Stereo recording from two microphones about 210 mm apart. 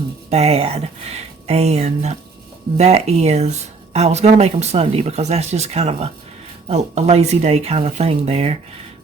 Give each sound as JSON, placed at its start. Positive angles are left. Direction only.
{"t": 0.3, "sound": "speech", "side_deg": -30}